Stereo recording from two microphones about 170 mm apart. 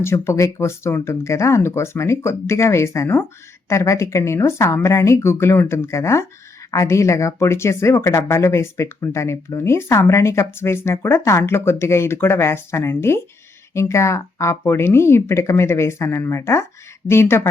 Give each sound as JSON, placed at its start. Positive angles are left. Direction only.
{"t": 0.0, "sound": "speech", "side_deg": 15}